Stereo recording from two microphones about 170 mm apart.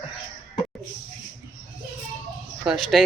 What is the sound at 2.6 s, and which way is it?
Speech, centre (ahead or behind).